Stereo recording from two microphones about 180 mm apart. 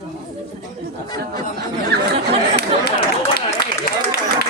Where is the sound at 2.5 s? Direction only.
60° left (ahead or behind).